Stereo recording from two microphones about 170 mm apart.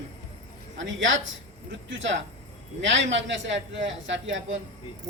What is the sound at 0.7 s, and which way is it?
A man's voice, 90° right.